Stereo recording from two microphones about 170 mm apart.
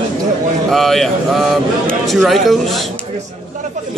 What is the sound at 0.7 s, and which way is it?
A man's voice, centre (ahead or behind).